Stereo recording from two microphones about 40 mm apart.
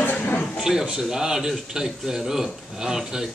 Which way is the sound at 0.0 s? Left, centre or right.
Left.